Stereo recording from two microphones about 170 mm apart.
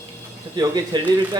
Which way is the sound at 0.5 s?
25° right (ahead or behind).